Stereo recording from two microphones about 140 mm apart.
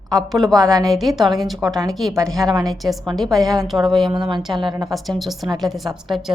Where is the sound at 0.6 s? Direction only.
25° right (ahead or behind).